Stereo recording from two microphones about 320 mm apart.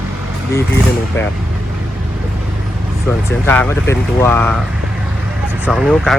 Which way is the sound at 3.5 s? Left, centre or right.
Centre.